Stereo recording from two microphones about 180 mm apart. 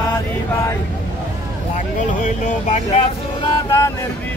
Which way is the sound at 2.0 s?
40° left (ahead or behind).